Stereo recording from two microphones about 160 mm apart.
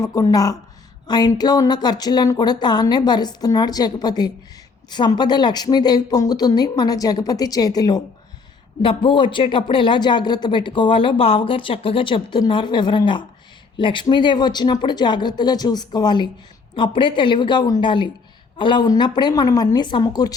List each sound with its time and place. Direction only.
0.0 s a woman's voice: 20° left (ahead or behind)